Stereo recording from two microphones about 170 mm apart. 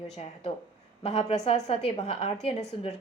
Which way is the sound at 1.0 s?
40° left (ahead or behind).